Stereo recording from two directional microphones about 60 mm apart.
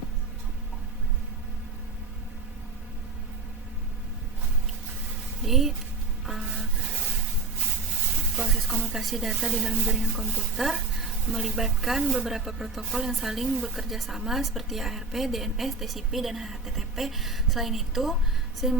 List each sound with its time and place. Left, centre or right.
5.5 s speech: centre
8.4 s music: centre
8.8 s speech: centre
18.6 s a sound: centre